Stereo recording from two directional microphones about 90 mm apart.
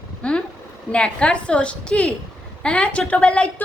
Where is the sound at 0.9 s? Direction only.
10° left (ahead or behind).